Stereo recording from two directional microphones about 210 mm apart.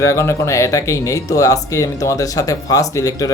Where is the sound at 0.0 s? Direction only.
15° left (ahead or behind).